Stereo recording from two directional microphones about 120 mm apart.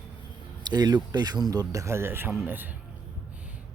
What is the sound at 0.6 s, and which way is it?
Speech, 35° right (ahead or behind).